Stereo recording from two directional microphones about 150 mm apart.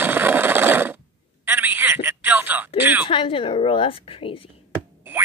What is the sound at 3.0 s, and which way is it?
A woman's voice, 35° left (ahead or behind).